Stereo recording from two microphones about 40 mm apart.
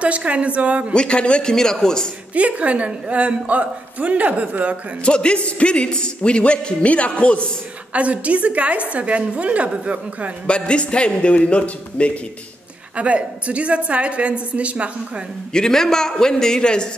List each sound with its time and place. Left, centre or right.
0.0 s a woman's voice: right
0.9 s speech: left
1.5 s a man's voice: centre
2.3 s a woman's voice: right
5.0 s speech: left
7.9 s a woman's voice: right
10.4 s speech: left
12.9 s a woman's voice: right
15.5 s a man's voice: centre